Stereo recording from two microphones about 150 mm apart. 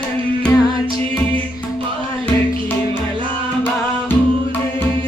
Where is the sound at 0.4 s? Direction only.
25° left (ahead or behind).